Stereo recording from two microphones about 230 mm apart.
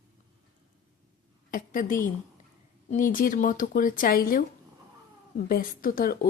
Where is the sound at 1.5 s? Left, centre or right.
Left.